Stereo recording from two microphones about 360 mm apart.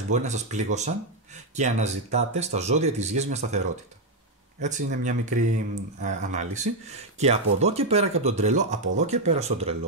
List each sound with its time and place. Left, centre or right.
0.1 s speech: centre